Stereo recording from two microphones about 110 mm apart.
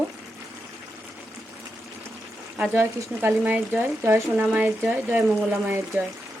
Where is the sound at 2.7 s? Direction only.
15° right (ahead or behind).